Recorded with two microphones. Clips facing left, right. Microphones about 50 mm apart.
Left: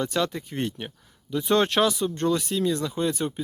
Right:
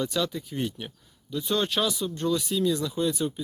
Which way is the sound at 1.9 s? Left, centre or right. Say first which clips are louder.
Left 3 dB; left.